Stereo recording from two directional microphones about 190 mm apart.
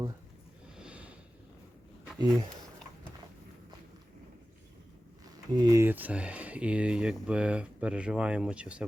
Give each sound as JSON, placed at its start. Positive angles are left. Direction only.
{"t": 0.8, "sound": "a sound", "side_deg": -5}
{"t": 2.1, "sound": "speech", "side_deg": -20}
{"t": 5.5, "sound": "speech", "side_deg": -15}